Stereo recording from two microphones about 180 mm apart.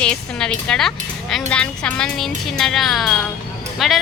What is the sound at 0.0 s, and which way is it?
Speech, 5° left (ahead or behind).